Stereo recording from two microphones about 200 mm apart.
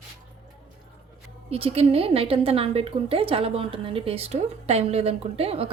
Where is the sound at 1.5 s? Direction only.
30° right (ahead or behind).